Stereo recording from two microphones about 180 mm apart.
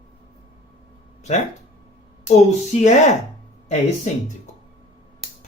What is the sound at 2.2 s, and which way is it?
Speech, 40° left (ahead or behind).